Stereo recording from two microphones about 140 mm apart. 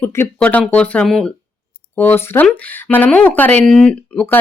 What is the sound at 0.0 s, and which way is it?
Speech, 15° left (ahead or behind).